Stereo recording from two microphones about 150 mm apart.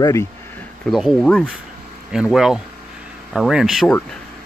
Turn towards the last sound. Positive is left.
turn(degrees=-5)  # may be behind; listen again after turning